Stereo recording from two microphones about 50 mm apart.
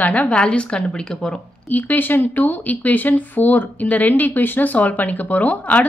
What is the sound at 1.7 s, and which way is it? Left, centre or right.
Speech, left.